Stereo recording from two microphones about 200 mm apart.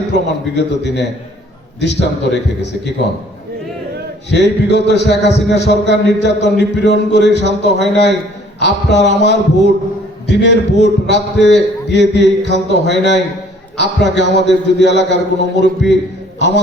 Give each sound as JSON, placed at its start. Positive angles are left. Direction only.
{"t": 0.1, "sound": "a man's voice", "side_deg": 60}
{"t": 4.3, "sound": "a man's voice", "side_deg": 60}